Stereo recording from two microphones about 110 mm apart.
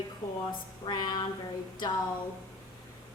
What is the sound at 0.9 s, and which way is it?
Speech, 40° left (ahead or behind).